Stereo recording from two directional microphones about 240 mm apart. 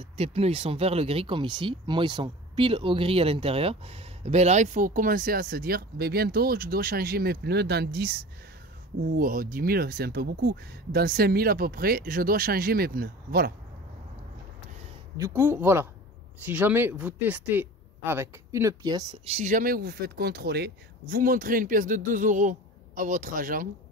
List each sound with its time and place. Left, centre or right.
0.2 s speech: right
9.2 s speech: right
15.1 s speech: centre; by 23.7 s right